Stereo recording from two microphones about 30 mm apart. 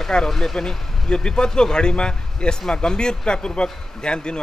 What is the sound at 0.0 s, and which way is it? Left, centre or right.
Speech, centre.